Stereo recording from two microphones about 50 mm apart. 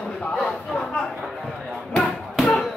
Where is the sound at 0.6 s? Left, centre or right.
Centre.